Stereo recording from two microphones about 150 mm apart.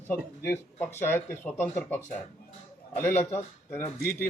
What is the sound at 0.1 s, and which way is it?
Speech, 15° left (ahead or behind).